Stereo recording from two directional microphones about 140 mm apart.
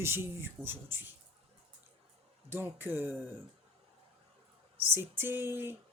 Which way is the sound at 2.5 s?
15° right (ahead or behind).